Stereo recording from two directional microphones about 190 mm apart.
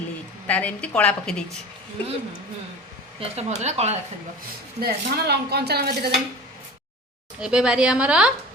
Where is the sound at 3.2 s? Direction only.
35° right (ahead or behind).